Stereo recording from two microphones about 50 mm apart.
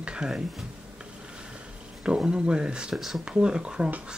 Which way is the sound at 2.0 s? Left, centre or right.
Centre.